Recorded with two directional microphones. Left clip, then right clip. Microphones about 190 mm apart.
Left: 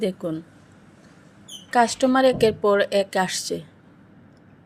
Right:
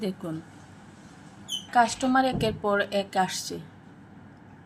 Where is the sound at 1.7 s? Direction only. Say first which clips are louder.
Left 4 dB; 45° left (ahead or behind).